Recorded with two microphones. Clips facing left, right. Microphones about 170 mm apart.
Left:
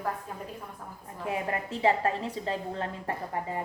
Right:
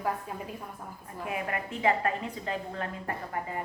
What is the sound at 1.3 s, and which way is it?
A woman's voice, 30° left (ahead or behind).